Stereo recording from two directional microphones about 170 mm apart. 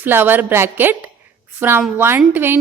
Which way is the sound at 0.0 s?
10° right (ahead or behind).